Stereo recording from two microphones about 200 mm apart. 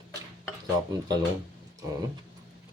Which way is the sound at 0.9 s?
20° right (ahead or behind).